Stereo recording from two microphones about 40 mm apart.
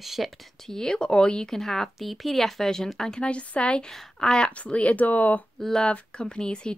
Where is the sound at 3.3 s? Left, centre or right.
Left.